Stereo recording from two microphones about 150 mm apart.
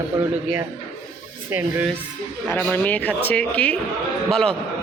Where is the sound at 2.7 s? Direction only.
10° left (ahead or behind).